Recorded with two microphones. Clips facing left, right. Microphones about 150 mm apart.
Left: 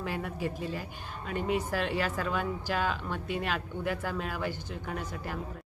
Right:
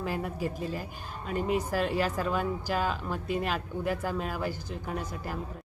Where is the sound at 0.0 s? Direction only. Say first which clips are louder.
Right 2 dB; 40° right (ahead or behind).